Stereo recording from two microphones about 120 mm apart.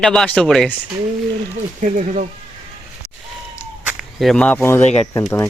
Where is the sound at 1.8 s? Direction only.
90° right.